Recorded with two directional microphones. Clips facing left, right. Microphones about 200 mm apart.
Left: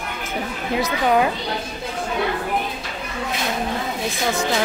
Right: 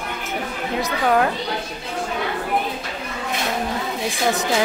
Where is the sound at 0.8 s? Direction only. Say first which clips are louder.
Even; centre (ahead or behind).